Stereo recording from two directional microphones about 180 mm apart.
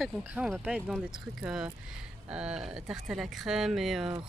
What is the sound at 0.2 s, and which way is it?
Speech, 5° right (ahead or behind).